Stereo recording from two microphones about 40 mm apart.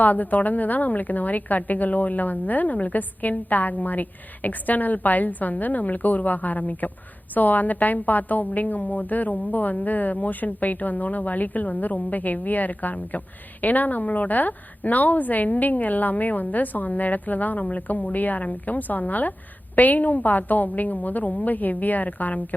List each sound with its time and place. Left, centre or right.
0.0 s a woman's voice: left